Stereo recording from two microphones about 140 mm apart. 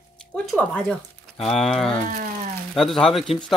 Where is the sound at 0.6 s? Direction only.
10° left (ahead or behind).